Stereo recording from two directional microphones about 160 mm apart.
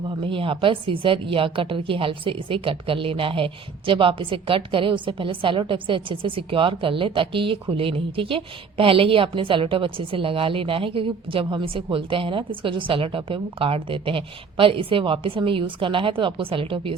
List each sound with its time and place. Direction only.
0.1 s a woman's voice: 30° right (ahead or behind)